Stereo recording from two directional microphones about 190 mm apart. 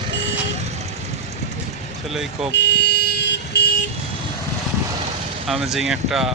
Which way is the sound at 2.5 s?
65° left (ahead or behind).